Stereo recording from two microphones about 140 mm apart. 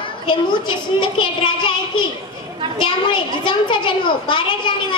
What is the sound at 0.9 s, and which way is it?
Speech, 35° left (ahead or behind).